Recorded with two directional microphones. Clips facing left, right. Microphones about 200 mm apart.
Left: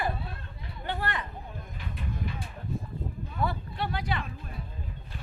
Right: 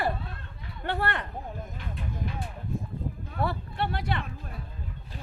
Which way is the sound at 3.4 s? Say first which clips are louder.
Right 2 dB; 65° right (ahead or behind).